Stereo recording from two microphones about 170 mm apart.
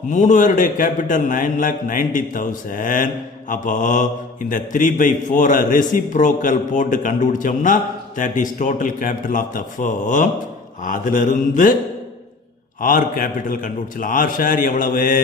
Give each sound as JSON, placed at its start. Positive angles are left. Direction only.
{"t": 0.1, "sound": "mantra", "side_deg": 45}
{"t": 12.8, "sound": "mantra", "side_deg": 55}